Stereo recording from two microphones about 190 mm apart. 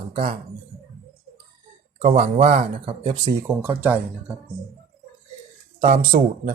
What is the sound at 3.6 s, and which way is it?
Speech, 10° right (ahead or behind).